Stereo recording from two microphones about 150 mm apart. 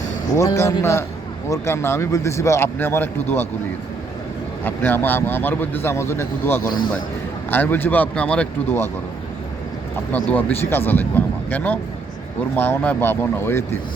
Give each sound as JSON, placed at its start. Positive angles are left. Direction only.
{"t": 0.3, "sound": "a man's voice", "side_deg": 20}
{"t": 4.6, "sound": "a man's voice", "side_deg": 10}
{"t": 6.7, "sound": "a man's voice", "side_deg": 30}
{"t": 7.5, "sound": "a man's voice", "side_deg": 15}
{"t": 10.1, "sound": "a man's voice", "side_deg": 10}